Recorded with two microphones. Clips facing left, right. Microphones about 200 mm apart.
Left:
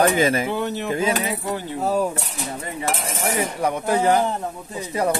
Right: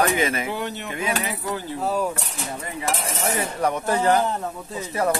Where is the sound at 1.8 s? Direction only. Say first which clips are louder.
Left 3 dB; 40° left (ahead or behind).